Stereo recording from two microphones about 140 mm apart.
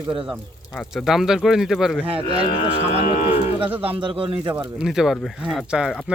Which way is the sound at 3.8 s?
40° right (ahead or behind).